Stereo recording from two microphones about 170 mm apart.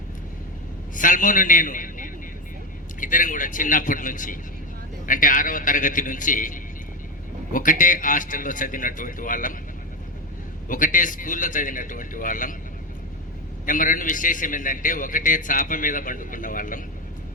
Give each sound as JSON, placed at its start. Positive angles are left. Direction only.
{"t": 0.9, "sound": "a man's voice", "side_deg": 50}
{"t": 10.7, "sound": "a man's voice", "side_deg": 50}
{"t": 13.7, "sound": "a man's voice", "side_deg": 50}